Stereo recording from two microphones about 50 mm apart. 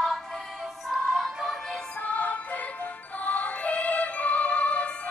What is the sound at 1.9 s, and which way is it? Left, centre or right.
Music, left.